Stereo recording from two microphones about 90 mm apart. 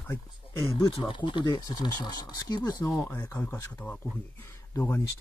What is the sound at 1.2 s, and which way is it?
Speech, 55° left (ahead or behind).